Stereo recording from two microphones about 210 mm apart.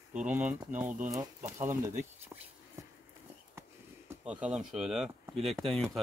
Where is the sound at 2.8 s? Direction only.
15° right (ahead or behind).